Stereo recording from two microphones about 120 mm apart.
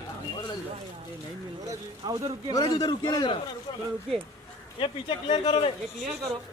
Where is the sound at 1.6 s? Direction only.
30° right (ahead or behind).